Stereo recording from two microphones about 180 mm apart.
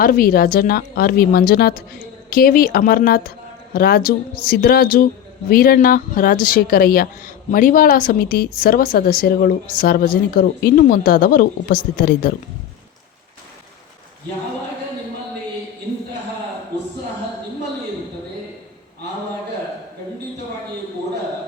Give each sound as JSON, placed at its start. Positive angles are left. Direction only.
{"t": 0.0, "sound": "a woman's voice", "side_deg": 55}